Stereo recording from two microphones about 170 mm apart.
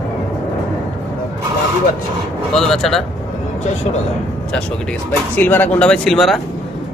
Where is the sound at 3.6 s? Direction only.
40° left (ahead or behind).